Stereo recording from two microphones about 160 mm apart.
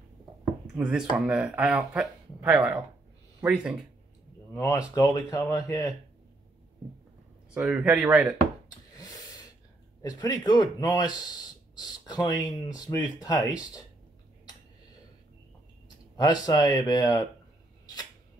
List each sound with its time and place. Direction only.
0.7 s speech: 5° right (ahead or behind)
4.6 s speech: 20° left (ahead or behind)
7.5 s speech: 10° right (ahead or behind)
8.9 s snort: 20° left (ahead or behind)
10.0 s speech: 25° left (ahead or behind)
16.2 s speech: 25° left (ahead or behind)